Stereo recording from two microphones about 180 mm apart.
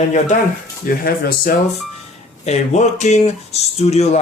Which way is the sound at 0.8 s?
55° left (ahead or behind).